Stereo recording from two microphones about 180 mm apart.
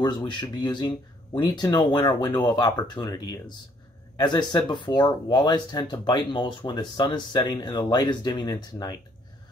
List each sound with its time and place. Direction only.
0.0 s speech: 25° left (ahead or behind)